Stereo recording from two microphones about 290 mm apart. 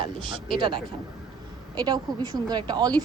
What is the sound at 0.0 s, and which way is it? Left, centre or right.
Speech, centre.